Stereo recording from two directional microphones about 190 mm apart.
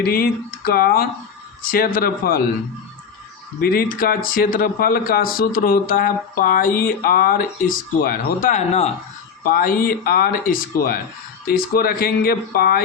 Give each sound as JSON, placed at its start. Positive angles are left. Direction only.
{"t": 0.0, "sound": "speech", "side_deg": 55}
{"t": 3.6, "sound": "speech", "side_deg": 50}
{"t": 9.4, "sound": "speech", "side_deg": 50}